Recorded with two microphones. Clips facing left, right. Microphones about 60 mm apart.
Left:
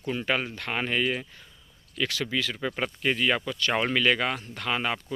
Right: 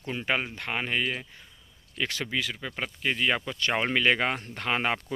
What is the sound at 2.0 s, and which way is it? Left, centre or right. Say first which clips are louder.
Speech: left 2 dB; right.